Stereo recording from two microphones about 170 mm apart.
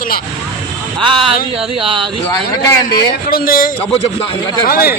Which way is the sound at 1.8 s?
30° right (ahead or behind).